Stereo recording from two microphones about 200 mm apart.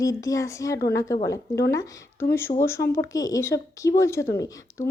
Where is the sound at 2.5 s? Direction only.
30° left (ahead or behind).